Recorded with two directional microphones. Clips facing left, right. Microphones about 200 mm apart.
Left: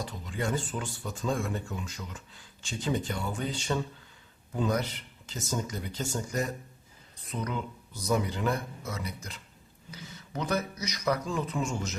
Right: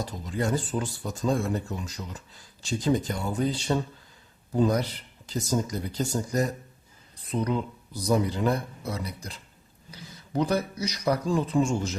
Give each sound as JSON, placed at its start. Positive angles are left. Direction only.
{"t": 0.0, "sound": "speech", "side_deg": -40}